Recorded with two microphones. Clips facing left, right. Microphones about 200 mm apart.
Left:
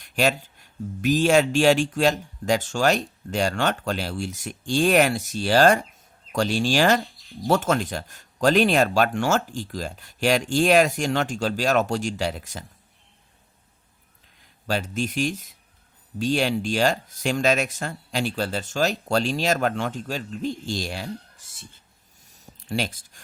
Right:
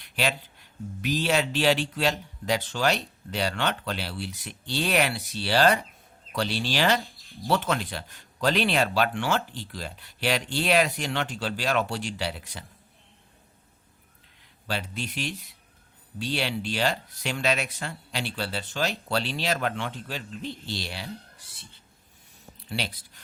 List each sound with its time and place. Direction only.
0.0 s speech: 45° left (ahead or behind)
14.7 s speech: 45° left (ahead or behind)
22.4 s a sound: 45° left (ahead or behind)